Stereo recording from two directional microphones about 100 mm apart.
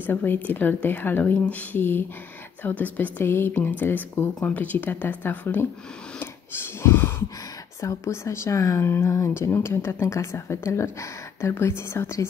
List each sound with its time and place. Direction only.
0.0 s speech: 20° left (ahead or behind)
6.1 s gasp: 20° left (ahead or behind)
7.8 s speech: 30° left (ahead or behind)